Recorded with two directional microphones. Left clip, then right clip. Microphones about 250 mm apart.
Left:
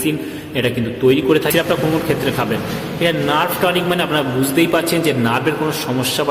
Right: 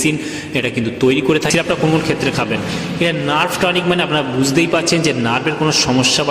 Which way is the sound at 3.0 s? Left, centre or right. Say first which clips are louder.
Even; right.